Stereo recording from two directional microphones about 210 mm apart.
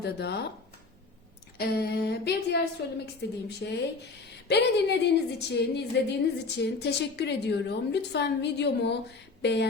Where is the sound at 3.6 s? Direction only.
55° left (ahead or behind).